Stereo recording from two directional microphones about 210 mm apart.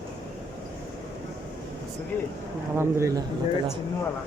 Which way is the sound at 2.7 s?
10° right (ahead or behind).